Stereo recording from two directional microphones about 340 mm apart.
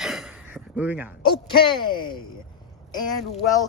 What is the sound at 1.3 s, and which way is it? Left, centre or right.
Speech, centre.